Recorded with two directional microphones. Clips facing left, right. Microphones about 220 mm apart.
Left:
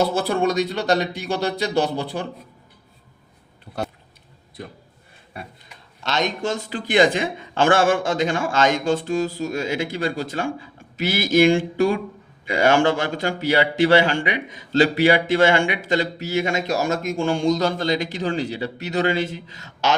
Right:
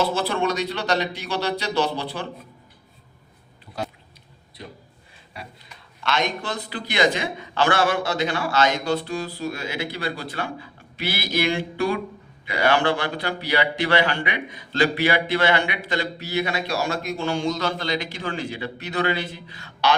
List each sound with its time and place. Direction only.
0.0 s a man's voice: 50° left (ahead or behind)
6.8 s a man's voice: 50° left (ahead or behind)